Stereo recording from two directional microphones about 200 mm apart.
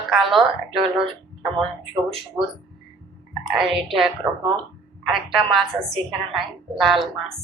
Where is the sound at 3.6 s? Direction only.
Centre (ahead or behind).